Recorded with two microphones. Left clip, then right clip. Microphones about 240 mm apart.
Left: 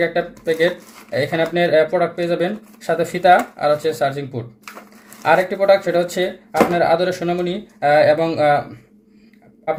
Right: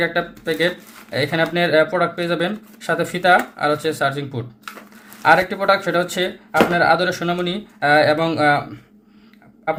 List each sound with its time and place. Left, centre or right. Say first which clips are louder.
0.0 s speech: left 1 dB; right
5.2 s speech: even; right